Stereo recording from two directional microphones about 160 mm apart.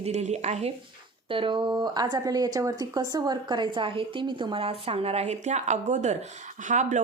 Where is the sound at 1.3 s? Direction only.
30° right (ahead or behind); by 7.0 s 50° right (ahead or behind).